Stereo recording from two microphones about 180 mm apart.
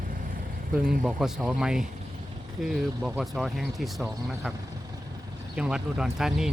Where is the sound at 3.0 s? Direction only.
Centre (ahead or behind).